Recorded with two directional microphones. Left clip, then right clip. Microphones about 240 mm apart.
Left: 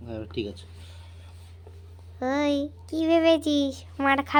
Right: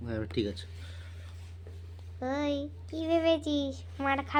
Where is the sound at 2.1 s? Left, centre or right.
Left.